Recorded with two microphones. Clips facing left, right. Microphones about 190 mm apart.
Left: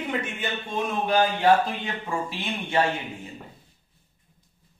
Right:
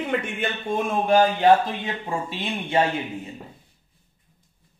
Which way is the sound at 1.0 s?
25° right (ahead or behind).